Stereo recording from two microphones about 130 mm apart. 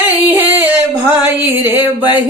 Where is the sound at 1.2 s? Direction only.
15° right (ahead or behind).